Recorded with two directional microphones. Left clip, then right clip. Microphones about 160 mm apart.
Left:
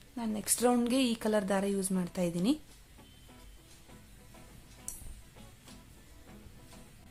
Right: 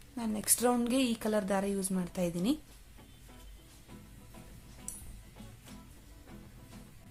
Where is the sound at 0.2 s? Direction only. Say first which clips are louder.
Left 1 dB; 10° left (ahead or behind).